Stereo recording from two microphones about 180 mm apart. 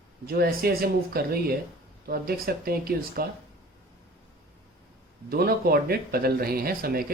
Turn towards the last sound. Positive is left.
turn(degrees=-55)  # may be behind; listen again after turning